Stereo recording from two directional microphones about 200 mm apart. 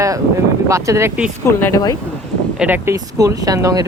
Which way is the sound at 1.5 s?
10° left (ahead or behind).